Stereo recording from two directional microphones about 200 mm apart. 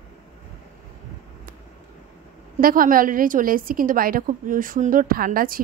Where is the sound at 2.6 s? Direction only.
45° right (ahead or behind).